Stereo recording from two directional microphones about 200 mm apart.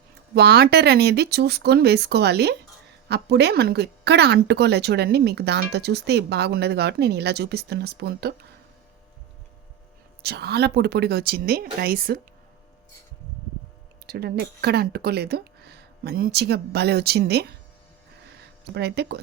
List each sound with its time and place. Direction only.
0.3 s speech: 55° right (ahead or behind)
10.2 s speech: 55° right (ahead or behind)
14.1 s speech: 50° right (ahead or behind)
18.7 s speech: 55° right (ahead or behind)